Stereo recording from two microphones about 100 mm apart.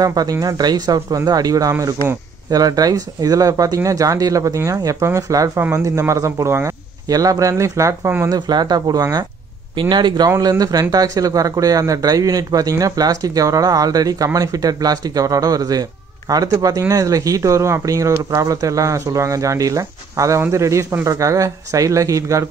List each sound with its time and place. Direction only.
0.0 s speech: 40° right (ahead or behind)
8.4 s speech: 45° right (ahead or behind)
10.3 s speech: 35° right (ahead or behind)